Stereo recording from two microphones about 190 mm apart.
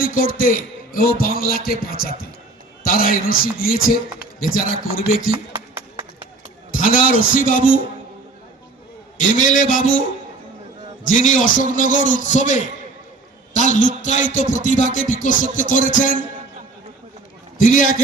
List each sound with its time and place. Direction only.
0.0 s a man's voice: 45° left (ahead or behind)
5.5 s music: 15° right (ahead or behind)
6.7 s a man's voice: 45° left (ahead or behind)
9.3 s a man's voice: 45° left (ahead or behind)
11.0 s a man's voice: 40° left (ahead or behind)
17.6 s a man's voice: 45° left (ahead or behind)